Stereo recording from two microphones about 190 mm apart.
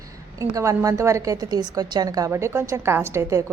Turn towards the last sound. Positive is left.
turn(degrees=-15)  # may be behind; listen again after turning